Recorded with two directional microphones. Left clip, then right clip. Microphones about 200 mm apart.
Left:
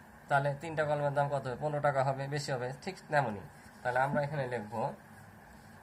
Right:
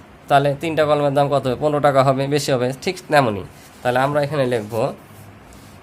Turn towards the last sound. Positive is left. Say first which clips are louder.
# right 16 dB
turn(degrees=-45)  # may be behind; listen again after turning